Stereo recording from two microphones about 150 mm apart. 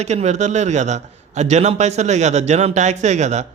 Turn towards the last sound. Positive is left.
turn(degrees=-50)  # may be behind; listen again after turning